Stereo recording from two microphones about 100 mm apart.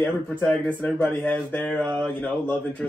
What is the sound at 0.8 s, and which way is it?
Speech, 15° left (ahead or behind).